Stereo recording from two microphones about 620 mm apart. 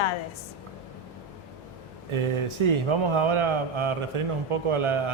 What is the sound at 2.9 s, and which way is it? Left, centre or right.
Speech, right.